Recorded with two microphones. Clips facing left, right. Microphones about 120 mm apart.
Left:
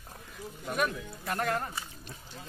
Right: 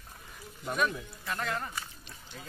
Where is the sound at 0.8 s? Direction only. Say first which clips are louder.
Even; 50° left (ahead or behind).